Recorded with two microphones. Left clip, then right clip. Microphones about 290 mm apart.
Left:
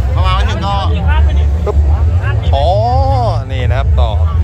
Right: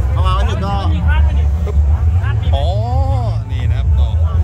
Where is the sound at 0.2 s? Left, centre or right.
Right.